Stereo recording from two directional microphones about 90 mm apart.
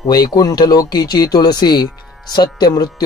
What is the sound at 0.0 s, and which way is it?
Speech, 50° left (ahead or behind).